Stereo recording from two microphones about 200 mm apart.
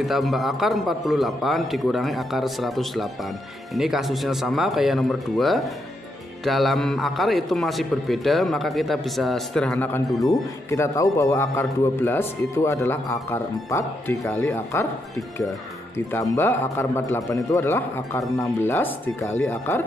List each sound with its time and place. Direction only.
0.0 s a man's voice: centre (ahead or behind)
16.1 s a man's voice: 10° left (ahead or behind)